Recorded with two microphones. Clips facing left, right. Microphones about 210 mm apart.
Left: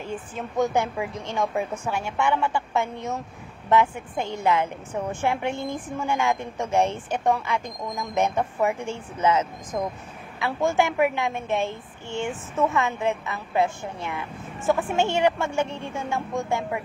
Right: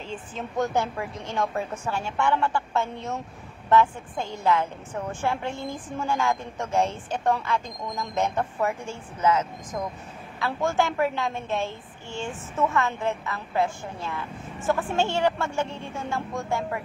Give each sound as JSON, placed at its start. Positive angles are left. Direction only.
{"t": 0.4, "sound": "a woman's voice", "side_deg": 15}